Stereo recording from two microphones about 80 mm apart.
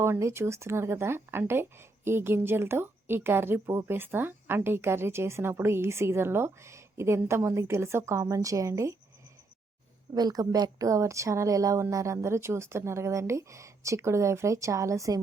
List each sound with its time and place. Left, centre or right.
0.0 s speech: right
10.2 s speech: right